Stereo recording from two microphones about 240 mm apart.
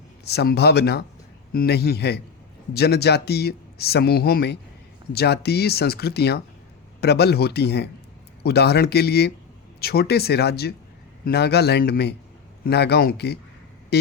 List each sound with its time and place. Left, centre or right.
0.3 s speech: left